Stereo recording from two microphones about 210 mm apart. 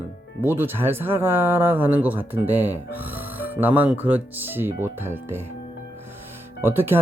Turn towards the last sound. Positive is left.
turn(degrees=-10)  # may be behind; listen again after turning